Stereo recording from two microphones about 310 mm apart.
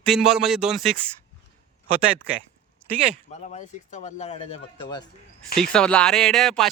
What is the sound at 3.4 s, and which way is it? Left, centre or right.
Speech, left.